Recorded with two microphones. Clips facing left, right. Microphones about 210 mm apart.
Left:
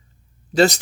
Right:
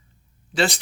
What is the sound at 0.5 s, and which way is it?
Speech, 40° left (ahead or behind).